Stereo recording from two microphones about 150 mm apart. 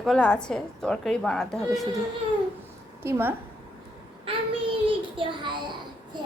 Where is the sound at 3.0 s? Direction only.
15° right (ahead or behind).